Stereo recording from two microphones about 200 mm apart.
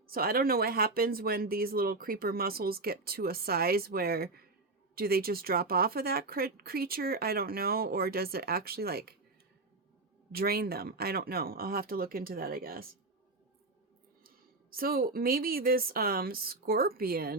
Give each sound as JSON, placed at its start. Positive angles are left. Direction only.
{"t": 0.1, "sound": "speech", "side_deg": -45}
{"t": 10.3, "sound": "speech", "side_deg": -50}
{"t": 14.3, "sound": "speech", "side_deg": -45}